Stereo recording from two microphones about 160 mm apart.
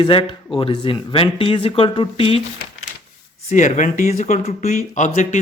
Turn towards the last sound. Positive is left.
turn(degrees=50)  # may be behind; listen again after turning